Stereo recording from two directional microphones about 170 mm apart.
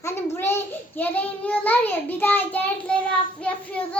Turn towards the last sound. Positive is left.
turn(degrees=5)  # may be behind; listen again after turning